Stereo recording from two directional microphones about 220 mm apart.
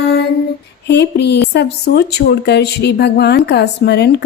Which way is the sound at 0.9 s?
50° left (ahead or behind).